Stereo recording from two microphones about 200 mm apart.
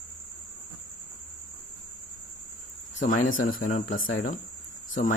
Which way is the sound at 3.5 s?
45° left (ahead or behind).